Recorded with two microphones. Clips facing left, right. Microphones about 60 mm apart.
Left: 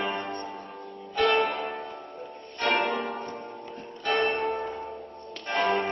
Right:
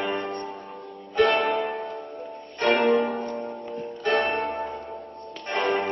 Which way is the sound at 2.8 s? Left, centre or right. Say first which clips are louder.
Right 8 dB; centre.